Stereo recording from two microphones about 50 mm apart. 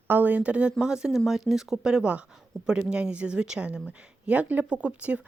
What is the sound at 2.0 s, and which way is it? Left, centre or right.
A woman's voice, right.